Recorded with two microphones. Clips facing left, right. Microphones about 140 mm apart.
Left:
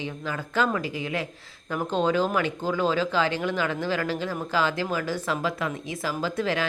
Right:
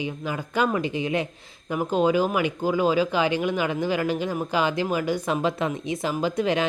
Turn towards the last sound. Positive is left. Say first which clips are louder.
# right 3 dB
turn(degrees=-20)  # may be behind; listen again after turning